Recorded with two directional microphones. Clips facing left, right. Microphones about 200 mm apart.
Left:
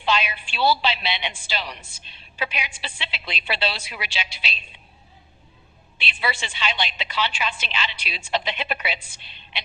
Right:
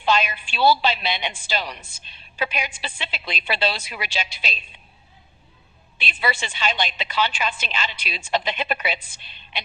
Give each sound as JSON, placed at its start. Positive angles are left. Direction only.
{"t": 0.0, "sound": "a woman's voice", "side_deg": -45}
{"t": 6.0, "sound": "a woman's voice", "side_deg": -45}